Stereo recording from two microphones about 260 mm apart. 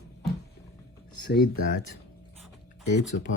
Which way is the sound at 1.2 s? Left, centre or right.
Left.